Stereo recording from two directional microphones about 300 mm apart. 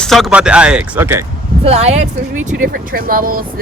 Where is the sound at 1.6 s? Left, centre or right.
Right.